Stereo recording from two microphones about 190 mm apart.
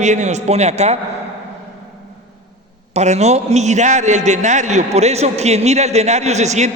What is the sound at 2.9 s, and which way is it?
A man's voice, 35° right (ahead or behind).